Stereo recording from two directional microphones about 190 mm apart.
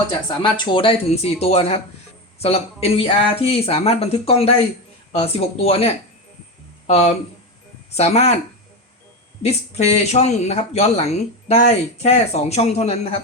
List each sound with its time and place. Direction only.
0.4 s speech: 25° left (ahead or behind)
9.4 s speech: 35° left (ahead or behind)